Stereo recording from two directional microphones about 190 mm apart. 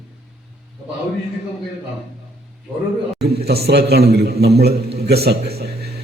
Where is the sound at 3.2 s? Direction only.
60° right (ahead or behind).